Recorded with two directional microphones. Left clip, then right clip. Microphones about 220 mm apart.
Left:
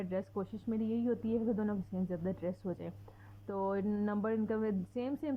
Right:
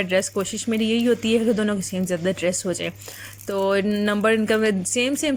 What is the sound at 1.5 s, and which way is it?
Speech, 25° right (ahead or behind).